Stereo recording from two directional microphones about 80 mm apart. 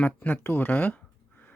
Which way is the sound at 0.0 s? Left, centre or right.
Left.